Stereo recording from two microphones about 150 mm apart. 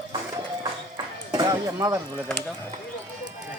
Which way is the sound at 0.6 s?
30° right (ahead or behind).